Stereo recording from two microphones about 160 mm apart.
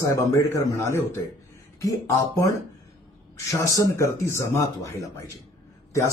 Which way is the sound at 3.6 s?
20° left (ahead or behind).